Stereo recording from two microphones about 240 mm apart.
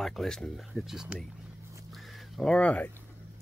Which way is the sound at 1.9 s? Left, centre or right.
Centre.